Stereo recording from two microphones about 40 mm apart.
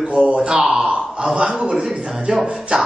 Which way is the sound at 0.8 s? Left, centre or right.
Right.